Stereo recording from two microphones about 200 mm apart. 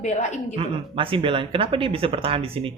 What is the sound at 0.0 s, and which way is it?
Speech, 35° left (ahead or behind).